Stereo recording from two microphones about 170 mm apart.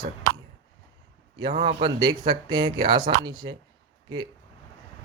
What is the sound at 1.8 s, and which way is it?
Speech, 25° right (ahead or behind).